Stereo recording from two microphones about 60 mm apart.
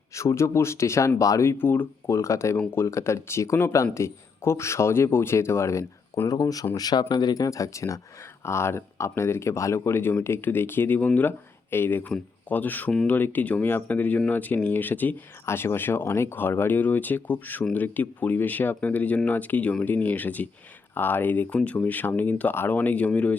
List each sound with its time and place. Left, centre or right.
0.1 s speech: left
1.5 s speech: left
2.0 s speech: left
2.6 s speech: left
6.2 s speech: left
8.4 s speech: left
15.4 s speech: left